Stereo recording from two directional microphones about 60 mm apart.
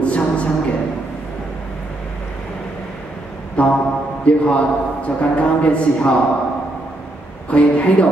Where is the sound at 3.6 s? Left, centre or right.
Left.